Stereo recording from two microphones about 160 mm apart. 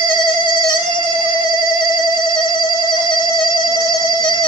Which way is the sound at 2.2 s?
25° left (ahead or behind).